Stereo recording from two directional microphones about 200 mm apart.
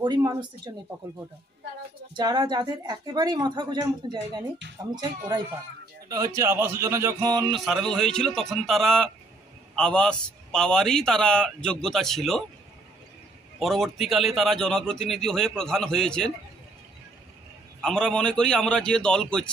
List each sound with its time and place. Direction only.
0.0 s a woman's voice: 20° right (ahead or behind)
2.1 s a woman's voice: 20° right (ahead or behind)
6.0 s a man's voice: 15° right (ahead or behind)
7.5 s a man's voice: centre (ahead or behind)
13.6 s a man's voice: centre (ahead or behind)
17.8 s a man's voice: 5° left (ahead or behind)